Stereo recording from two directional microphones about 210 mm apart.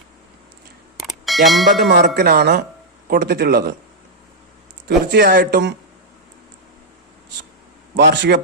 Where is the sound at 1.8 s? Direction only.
50° right (ahead or behind).